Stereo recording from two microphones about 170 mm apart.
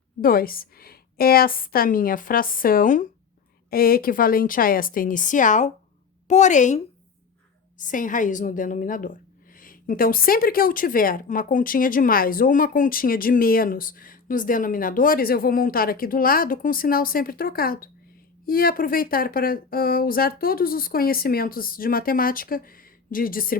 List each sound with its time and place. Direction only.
0.2 s speech: 60° left (ahead or behind)
3.7 s a woman's voice: 60° left (ahead or behind)